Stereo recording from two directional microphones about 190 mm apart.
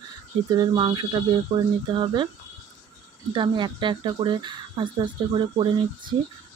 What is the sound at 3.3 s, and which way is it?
Speech, 25° right (ahead or behind).